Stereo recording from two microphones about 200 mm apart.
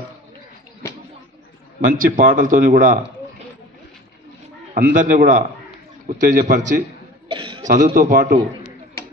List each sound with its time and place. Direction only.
1.9 s speech: 45° right (ahead or behind)
4.7 s a man's voice: 45° right (ahead or behind)
7.2 s cough: 25° right (ahead or behind)
7.6 s a man's voice: 40° right (ahead or behind)